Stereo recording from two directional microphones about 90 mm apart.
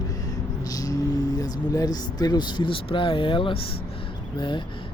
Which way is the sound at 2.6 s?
70° left (ahead or behind).